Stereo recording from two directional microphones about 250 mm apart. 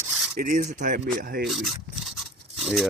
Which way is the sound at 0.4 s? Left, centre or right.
Right.